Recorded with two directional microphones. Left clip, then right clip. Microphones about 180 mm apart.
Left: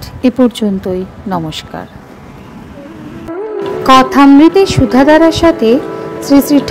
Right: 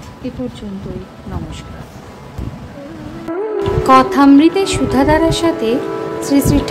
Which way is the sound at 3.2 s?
Centre (ahead or behind).